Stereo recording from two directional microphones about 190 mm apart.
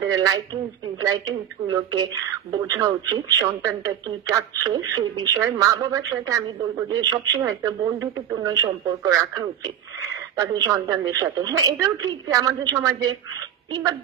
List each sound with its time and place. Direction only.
0.1 s a woman's voice: 20° right (ahead or behind)